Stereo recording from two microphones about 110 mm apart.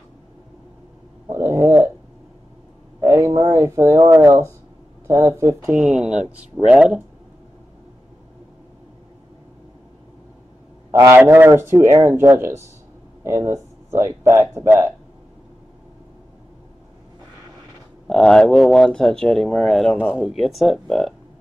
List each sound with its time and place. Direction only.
1.3 s a sound: 25° right (ahead or behind)
3.0 s speech: 30° right (ahead or behind)
5.7 s speech: 10° right (ahead or behind)
10.9 s a man's voice: 30° right (ahead or behind)
11.1 s speech: 20° right (ahead or behind)
18.0 s speech: 5° left (ahead or behind)